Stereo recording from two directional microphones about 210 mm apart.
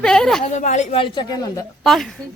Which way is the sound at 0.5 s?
35° left (ahead or behind).